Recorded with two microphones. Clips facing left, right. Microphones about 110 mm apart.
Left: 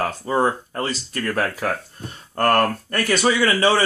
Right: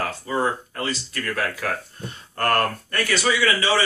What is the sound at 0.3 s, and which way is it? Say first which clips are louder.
Speech: left 4 dB; 40° left (ahead or behind).